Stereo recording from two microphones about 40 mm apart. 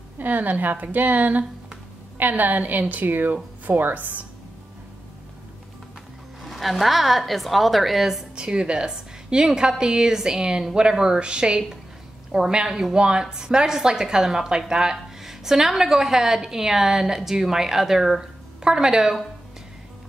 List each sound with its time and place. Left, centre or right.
0.2 s a woman's voice: right
6.4 s a woman's voice: centre
8.4 s a woman's voice: right
15.2 s a woman's voice: centre
18.2 s a woman's voice: centre